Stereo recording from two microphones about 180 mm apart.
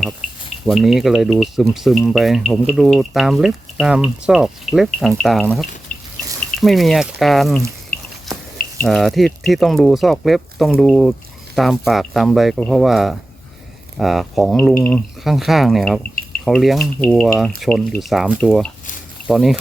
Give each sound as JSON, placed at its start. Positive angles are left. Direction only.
{"t": 0.7, "sound": "speech", "side_deg": 0}
{"t": 7.9, "sound": "a sound", "side_deg": 50}
{"t": 8.8, "sound": "speech", "side_deg": 5}